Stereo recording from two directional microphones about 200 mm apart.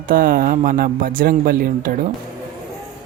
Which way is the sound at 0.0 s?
45° right (ahead or behind).